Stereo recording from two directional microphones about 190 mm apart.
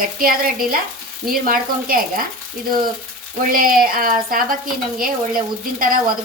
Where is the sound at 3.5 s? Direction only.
50° right (ahead or behind).